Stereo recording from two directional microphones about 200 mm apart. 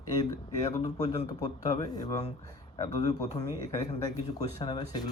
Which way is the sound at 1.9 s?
20° left (ahead or behind).